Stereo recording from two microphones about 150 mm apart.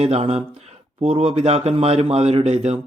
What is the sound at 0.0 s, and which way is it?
Speech, 45° right (ahead or behind).